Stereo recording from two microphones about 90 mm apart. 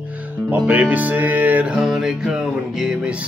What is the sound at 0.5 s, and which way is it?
Music, 20° right (ahead or behind).